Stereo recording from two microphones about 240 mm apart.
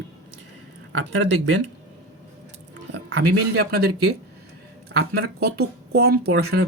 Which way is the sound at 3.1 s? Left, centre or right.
Right.